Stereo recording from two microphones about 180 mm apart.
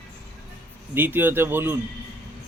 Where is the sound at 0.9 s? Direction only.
10° right (ahead or behind).